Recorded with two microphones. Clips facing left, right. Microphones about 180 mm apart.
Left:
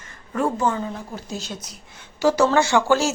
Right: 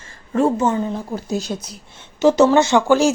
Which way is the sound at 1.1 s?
40° right (ahead or behind).